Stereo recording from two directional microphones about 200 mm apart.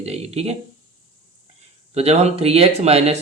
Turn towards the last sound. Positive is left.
turn(degrees=-30)  # may be behind; listen again after turning